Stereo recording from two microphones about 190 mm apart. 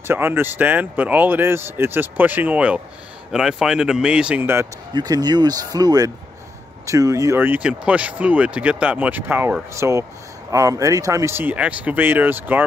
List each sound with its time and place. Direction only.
0.0 s speech: 10° right (ahead or behind)